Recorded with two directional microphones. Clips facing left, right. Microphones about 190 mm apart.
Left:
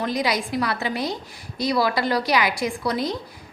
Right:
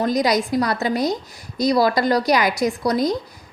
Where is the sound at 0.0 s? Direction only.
40° right (ahead or behind).